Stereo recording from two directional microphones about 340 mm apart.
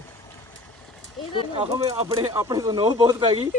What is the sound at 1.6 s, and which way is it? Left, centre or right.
Speech, centre.